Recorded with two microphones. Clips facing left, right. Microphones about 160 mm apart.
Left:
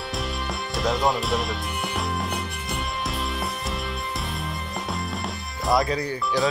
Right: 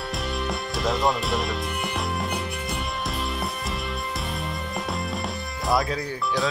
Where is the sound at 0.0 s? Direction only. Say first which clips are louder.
Right 1 dB; centre (ahead or behind).